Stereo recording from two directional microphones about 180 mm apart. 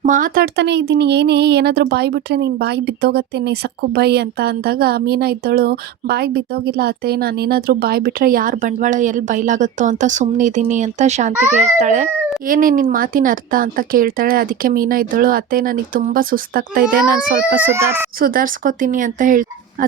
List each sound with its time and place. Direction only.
0.0 s a child's voice: 45° right (ahead or behind)
12.5 s speech: 50° right (ahead or behind)
17.6 s a child's voice: 15° right (ahead or behind)
18.2 s speech: 50° right (ahead or behind)